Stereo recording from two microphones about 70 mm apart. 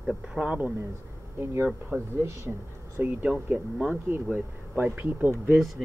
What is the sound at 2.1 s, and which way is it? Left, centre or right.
Speech, right.